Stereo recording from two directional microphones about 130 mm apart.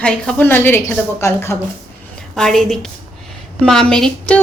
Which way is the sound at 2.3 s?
5° left (ahead or behind).